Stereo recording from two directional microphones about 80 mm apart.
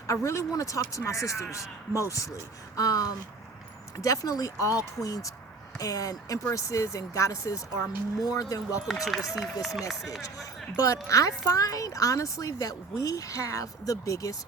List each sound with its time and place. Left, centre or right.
0.1 s a man's voice: left
9.6 s speech: centre
10.8 s speech: left